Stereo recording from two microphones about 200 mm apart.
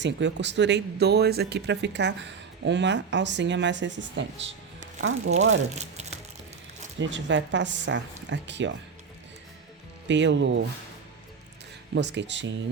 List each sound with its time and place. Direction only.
0.0 s speech: 60° right (ahead or behind)
4.9 s speech: 90° right
5.7 s crumpling: 35° right (ahead or behind)
7.0 s speech: 65° right (ahead or behind)
10.1 s speech: 65° right (ahead or behind)
11.9 s speech: 60° right (ahead or behind)